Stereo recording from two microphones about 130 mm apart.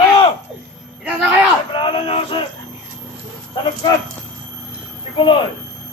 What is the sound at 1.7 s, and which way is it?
Speech, 40° left (ahead or behind).